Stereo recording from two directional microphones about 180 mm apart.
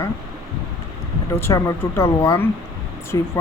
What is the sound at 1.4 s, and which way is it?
Speech, 15° left (ahead or behind).